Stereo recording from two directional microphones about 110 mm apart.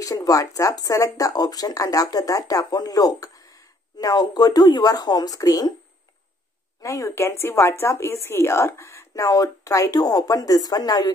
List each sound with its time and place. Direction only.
0.0 s speech: 30° left (ahead or behind)
6.8 s speech: 30° left (ahead or behind)